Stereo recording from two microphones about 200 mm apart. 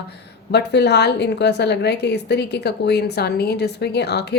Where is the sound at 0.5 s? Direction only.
55° left (ahead or behind).